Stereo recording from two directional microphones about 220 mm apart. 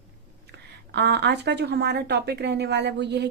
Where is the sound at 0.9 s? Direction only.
50° right (ahead or behind).